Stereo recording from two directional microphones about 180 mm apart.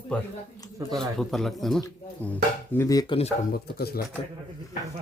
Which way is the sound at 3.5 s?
55° left (ahead or behind).